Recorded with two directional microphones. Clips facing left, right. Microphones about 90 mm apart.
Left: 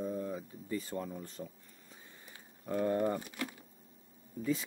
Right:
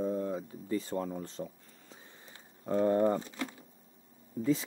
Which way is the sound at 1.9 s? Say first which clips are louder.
Right 1 dB; 30° right (ahead or behind).